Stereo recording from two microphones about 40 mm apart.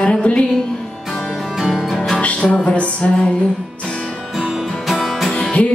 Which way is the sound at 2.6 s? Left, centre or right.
Left.